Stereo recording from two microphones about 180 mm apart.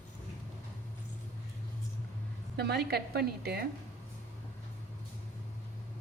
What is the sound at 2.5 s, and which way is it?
A woman's voice, 65° right (ahead or behind).